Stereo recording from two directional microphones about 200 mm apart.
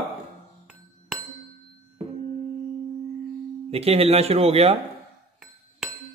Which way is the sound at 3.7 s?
30° right (ahead or behind).